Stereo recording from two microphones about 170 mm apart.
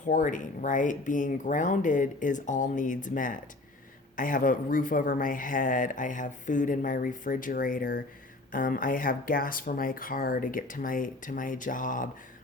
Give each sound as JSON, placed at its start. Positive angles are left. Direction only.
{"t": 0.0, "sound": "speech", "side_deg": 50}